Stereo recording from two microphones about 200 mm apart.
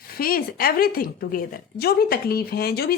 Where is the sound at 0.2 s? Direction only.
45° left (ahead or behind).